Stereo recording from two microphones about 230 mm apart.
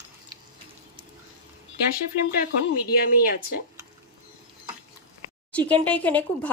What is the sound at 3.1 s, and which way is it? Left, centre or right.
Speech, left.